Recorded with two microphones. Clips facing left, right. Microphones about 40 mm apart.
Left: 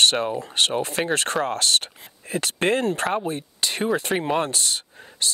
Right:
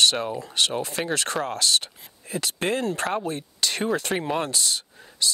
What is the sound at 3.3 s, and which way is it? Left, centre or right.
Speech, left.